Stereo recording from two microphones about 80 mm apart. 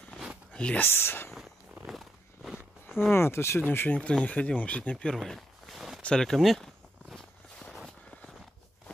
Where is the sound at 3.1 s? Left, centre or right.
Left; by 5.2 s centre.